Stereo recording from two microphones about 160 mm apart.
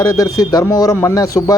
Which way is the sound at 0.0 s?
25° left (ahead or behind).